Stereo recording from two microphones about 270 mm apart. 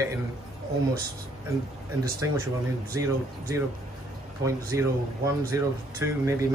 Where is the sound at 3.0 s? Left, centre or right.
Centre.